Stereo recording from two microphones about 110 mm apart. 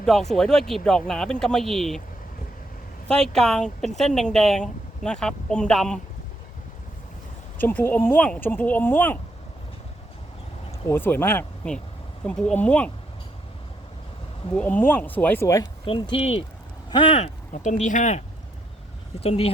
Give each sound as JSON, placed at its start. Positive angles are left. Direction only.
{"t": 0.0, "sound": "speech", "side_deg": 5}
{"t": 3.1, "sound": "speech", "side_deg": 5}
{"t": 7.6, "sound": "speech", "side_deg": 15}
{"t": 10.8, "sound": "speech", "side_deg": 20}
{"t": 14.5, "sound": "speech", "side_deg": 15}
{"t": 15.8, "sound": "speech", "side_deg": 50}
{"t": 17.2, "sound": "speech", "side_deg": 80}
{"t": 19.2, "sound": "speech", "side_deg": 65}